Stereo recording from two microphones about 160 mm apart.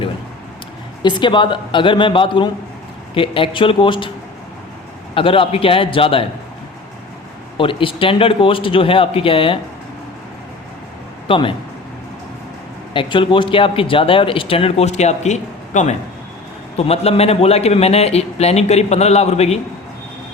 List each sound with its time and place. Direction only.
1.0 s speech: 30° left (ahead or behind)
5.1 s speech: 35° left (ahead or behind)
7.6 s speech: 35° left (ahead or behind)
11.3 s speech: 35° left (ahead or behind)
12.9 s speech: 30° left (ahead or behind)